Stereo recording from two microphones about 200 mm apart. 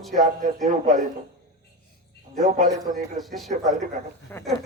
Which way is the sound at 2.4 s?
40° right (ahead or behind).